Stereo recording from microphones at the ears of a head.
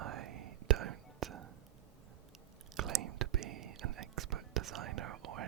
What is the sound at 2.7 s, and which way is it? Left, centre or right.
Whispering, right.